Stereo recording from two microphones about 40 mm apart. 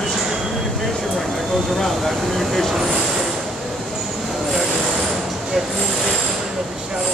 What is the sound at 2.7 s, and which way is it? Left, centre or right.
Train, centre.